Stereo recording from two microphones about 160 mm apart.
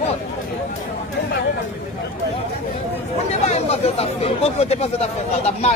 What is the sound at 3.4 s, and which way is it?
Speech, 40° left (ahead or behind).